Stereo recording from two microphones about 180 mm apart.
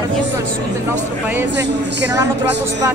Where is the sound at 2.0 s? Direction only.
15° right (ahead or behind).